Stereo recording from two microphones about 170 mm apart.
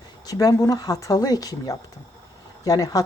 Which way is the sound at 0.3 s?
20° left (ahead or behind).